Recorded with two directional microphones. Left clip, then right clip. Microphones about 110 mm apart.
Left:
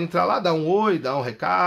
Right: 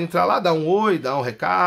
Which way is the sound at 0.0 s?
20° right (ahead or behind).